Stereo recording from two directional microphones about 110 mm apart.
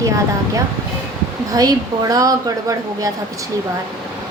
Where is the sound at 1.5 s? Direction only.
35° right (ahead or behind).